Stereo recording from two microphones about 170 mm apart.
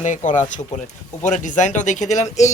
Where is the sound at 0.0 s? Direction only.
45° left (ahead or behind).